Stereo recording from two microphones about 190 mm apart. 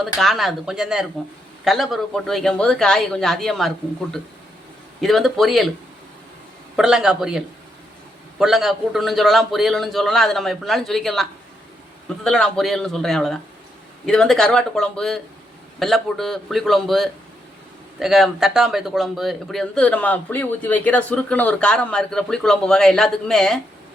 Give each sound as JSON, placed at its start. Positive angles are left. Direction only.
{"t": 0.2, "sound": "speech", "side_deg": 0}
{"t": 4.9, "sound": "speech", "side_deg": 0}
{"t": 6.7, "sound": "speech", "side_deg": -5}